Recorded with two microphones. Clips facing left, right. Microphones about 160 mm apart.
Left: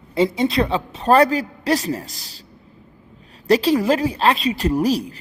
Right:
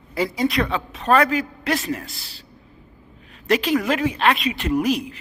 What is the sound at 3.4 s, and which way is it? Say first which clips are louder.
A man's voice: left 4 dB; 35° left (ahead or behind).